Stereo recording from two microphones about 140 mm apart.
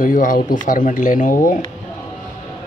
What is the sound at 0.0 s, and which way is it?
Mantra, 75° left (ahead or behind).